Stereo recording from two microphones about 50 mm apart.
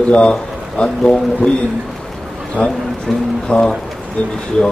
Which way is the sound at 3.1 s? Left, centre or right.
Centre.